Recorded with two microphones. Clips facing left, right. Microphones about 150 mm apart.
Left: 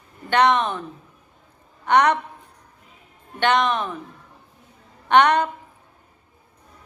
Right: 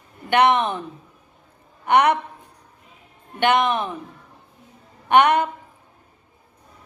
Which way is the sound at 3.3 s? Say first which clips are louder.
Right 1 dB; 10° right (ahead or behind).